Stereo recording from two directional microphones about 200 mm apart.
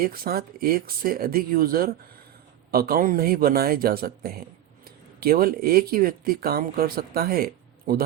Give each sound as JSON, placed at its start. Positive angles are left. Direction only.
{"t": 0.0, "sound": "speech", "side_deg": -45}